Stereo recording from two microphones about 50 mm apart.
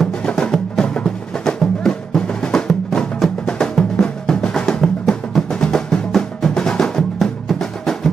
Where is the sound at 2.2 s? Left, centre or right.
Centre.